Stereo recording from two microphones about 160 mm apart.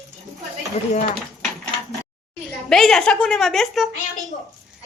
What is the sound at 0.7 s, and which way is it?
Speech, 45° left (ahead or behind).